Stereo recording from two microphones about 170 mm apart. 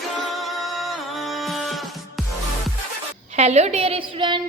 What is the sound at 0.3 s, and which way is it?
Music, centre (ahead or behind).